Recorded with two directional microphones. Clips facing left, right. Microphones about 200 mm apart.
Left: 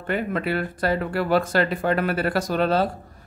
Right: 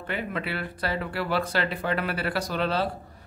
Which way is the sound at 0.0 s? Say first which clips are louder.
Left 6 dB; 45° left (ahead or behind).